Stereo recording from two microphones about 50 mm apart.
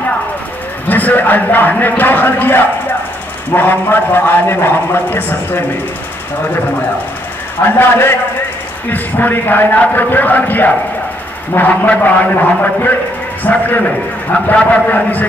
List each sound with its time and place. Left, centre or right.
0.8 s a man's voice: left
7.6 s a man's voice: left
8.9 s a man's voice: left